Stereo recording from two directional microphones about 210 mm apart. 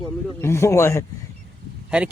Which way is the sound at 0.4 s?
10° left (ahead or behind).